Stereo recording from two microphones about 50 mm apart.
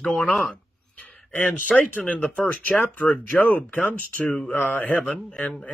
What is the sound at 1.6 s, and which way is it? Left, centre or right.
Speech, left.